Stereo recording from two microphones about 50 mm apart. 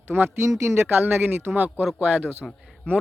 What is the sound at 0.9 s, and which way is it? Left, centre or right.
Speech, right.